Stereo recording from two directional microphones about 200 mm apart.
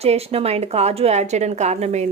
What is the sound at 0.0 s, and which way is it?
Speech, 30° right (ahead or behind).